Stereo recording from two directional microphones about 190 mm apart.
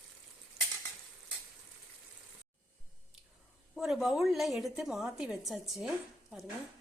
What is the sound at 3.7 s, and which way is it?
A woman's voice, centre (ahead or behind).